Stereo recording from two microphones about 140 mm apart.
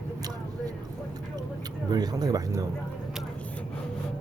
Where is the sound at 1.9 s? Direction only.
30° right (ahead or behind).